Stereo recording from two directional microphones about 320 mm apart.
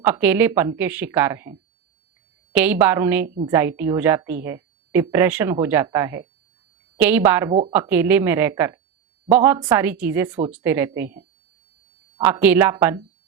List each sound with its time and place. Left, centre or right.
0.0 s a woman's voice: centre